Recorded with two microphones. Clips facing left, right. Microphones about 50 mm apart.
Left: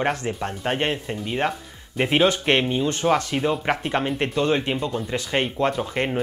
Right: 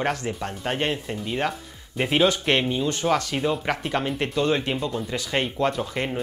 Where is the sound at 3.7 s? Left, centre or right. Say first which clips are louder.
Left 2 dB; left.